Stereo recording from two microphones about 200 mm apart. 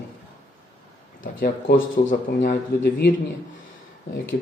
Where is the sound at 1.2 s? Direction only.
45° left (ahead or behind).